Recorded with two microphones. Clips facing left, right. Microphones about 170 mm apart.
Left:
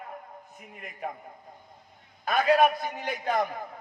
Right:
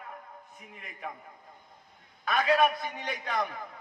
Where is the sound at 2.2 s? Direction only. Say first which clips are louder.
Left 3 dB; 40° left (ahead or behind).